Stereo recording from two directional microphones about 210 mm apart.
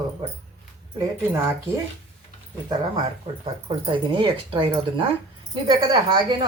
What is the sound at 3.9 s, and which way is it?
Speech, 25° right (ahead or behind).